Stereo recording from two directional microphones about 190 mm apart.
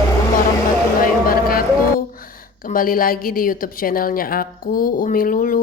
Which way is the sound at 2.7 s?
50° left (ahead or behind).